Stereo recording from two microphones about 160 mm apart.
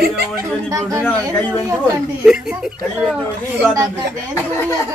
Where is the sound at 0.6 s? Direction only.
20° right (ahead or behind).